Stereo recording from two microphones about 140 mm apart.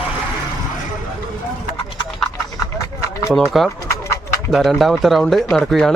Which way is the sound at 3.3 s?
Centre (ahead or behind).